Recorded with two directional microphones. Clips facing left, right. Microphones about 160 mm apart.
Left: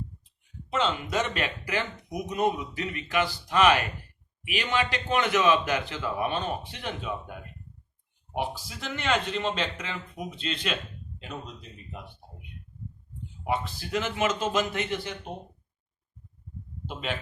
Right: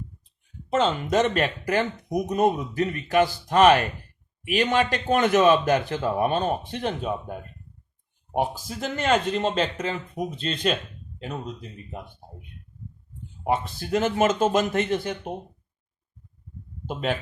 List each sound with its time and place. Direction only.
0.7 s speech: 45° right (ahead or behind)
16.8 s speech: 45° right (ahead or behind)